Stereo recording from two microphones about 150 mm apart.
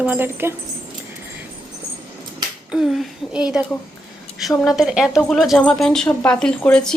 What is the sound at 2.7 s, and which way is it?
A woman's voice, 5° right (ahead or behind).